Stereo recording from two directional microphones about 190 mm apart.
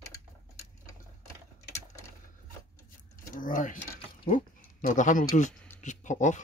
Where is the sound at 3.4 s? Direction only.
45° left (ahead or behind).